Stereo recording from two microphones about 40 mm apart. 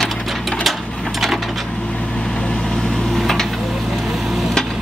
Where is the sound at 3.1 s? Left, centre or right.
Centre.